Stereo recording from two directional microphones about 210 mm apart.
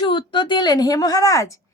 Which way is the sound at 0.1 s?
25° left (ahead or behind).